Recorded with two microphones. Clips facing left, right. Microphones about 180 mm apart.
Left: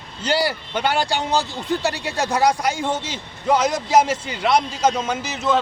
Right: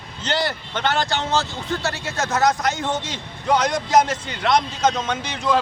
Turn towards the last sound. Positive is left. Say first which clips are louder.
# left 1 dB
turn(degrees=5)  # may be behind; listen again after turning